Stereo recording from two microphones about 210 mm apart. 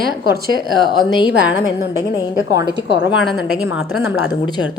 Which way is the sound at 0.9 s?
20° left (ahead or behind).